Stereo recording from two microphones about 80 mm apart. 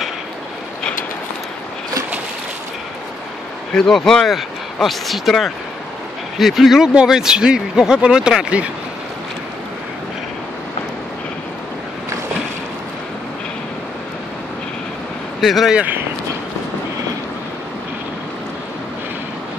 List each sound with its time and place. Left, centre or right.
3.7 s speech: centre
15.4 s speech: centre
15.7 s speech: centre